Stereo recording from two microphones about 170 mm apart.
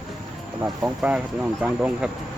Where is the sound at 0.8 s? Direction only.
5° right (ahead or behind).